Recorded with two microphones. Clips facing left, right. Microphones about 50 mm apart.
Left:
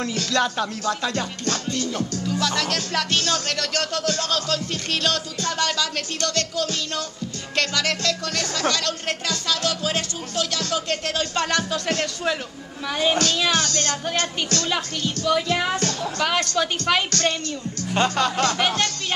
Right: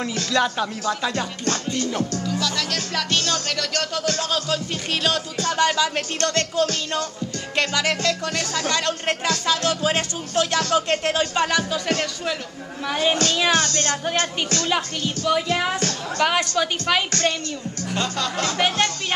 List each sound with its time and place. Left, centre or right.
0.0 s speech: centre
1.5 s music: centre
2.2 s speech: centre
4.2 s speech: centre
11.3 s speech: centre
13.5 s speech: right
15.0 s speech: centre
17.9 s speech: left